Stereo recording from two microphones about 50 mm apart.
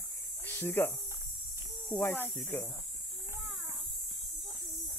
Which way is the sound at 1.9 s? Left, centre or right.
Centre.